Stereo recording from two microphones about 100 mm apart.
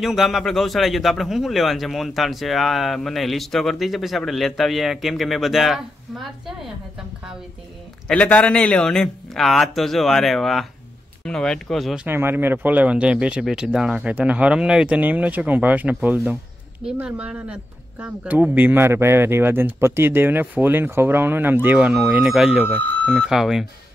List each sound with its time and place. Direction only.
0.0 s a man's voice: 5° right (ahead or behind)
8.1 s a man's voice: 15° left (ahead or behind)
12.1 s speech: 20° right (ahead or behind); by 22.7 s 5° right (ahead or behind)
22.7 s speech: 20° left (ahead or behind)
23.3 s a man's voice: 5° right (ahead or behind)